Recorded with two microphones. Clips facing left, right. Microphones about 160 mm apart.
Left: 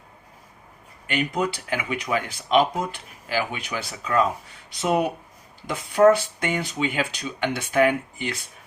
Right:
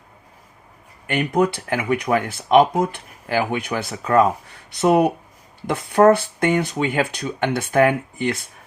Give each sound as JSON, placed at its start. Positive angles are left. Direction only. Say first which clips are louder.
{"t": 1.0, "sound": "speech", "louder": "right 6 dB", "side_deg": -60}